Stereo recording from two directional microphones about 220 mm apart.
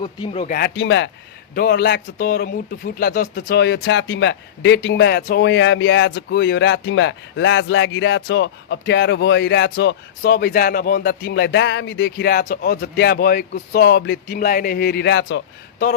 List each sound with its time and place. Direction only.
0.0 s speech: 20° left (ahead or behind)
0.4 s speech: 45° left (ahead or behind)
1.5 s speech: 45° left (ahead or behind)